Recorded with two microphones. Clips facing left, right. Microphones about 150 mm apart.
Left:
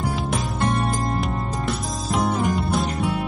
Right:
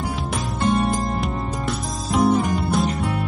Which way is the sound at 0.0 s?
Centre (ahead or behind).